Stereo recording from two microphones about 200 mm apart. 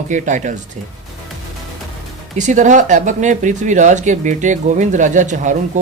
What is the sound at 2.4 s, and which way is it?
Speech, 35° right (ahead or behind).